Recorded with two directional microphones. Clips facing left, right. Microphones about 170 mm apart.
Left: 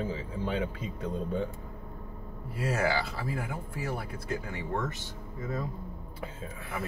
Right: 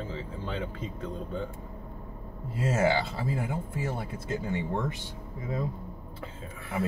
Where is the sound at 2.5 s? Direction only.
25° right (ahead or behind).